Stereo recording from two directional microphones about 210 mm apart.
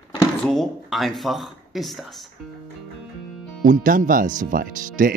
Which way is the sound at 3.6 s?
40° right (ahead or behind).